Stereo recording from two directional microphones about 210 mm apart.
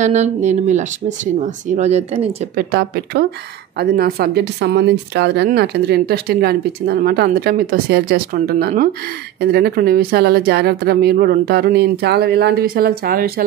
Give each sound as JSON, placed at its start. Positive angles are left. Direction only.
{"t": 0.0, "sound": "speech", "side_deg": -35}
{"t": 2.7, "sound": "a woman's voice", "side_deg": -50}